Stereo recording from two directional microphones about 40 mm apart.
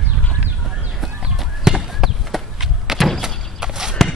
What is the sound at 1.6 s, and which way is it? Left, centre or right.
Clip-clop, centre.